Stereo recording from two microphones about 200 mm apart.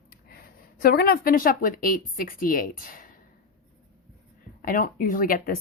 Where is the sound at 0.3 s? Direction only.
50° left (ahead or behind).